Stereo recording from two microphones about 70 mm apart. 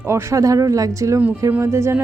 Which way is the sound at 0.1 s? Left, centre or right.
Right.